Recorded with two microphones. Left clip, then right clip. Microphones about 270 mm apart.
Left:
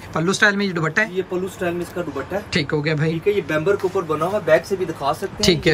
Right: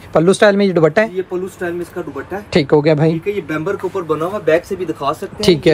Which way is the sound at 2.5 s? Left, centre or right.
Centre.